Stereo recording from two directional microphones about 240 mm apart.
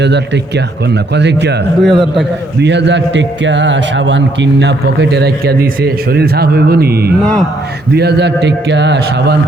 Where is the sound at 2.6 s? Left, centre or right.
Right.